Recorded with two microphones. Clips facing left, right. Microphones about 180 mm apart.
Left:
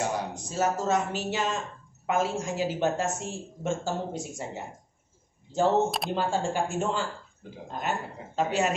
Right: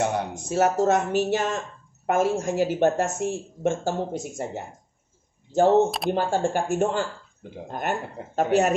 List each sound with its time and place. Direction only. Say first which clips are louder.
0.0 s speech: right 4 dB; 60° right (ahead or behind)
0.6 s a woman's voice: right 5 dB; 65° right (ahead or behind)
5.9 s speech: right 5 dB; centre (ahead or behind)
6.1 s a woman's voice: right 3 dB; 60° right (ahead or behind)